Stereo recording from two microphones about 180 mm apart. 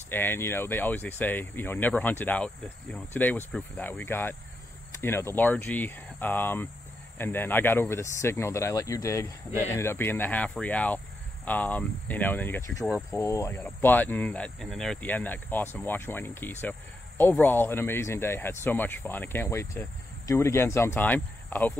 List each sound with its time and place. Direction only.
0.1 s speech: 10° left (ahead or behind)